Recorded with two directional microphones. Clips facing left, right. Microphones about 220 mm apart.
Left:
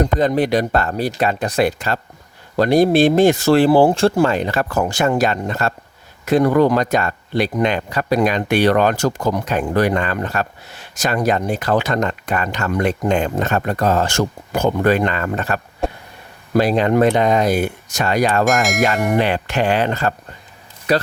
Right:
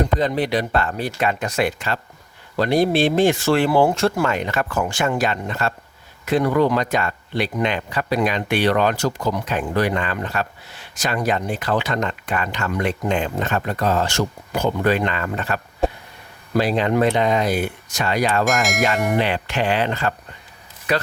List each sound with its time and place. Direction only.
0.0 s speech: 45° left (ahead or behind)
18.4 s speech: centre (ahead or behind)
19.1 s speech: 45° left (ahead or behind)